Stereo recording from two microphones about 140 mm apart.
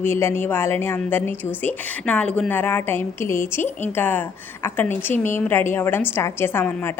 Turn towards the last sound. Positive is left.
turn(degrees=15)  # may be behind; listen again after turning